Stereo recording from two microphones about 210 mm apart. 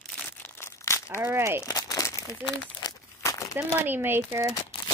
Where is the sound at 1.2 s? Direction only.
10° right (ahead or behind).